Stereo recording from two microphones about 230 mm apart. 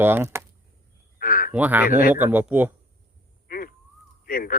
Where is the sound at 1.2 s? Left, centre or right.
Left.